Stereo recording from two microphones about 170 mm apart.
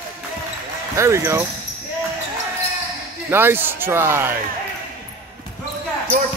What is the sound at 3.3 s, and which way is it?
Speech, 15° right (ahead or behind).